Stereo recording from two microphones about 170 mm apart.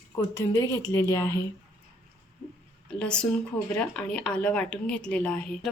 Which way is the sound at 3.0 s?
5° left (ahead or behind).